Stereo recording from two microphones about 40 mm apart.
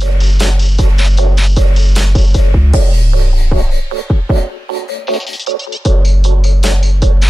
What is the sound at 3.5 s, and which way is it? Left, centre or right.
Music, centre.